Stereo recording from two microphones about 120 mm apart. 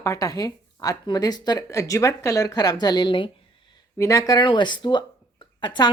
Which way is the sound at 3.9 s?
25° left (ahead or behind).